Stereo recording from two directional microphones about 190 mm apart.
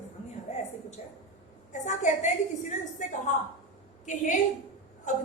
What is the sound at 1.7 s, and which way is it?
A woman's voice, 40° left (ahead or behind).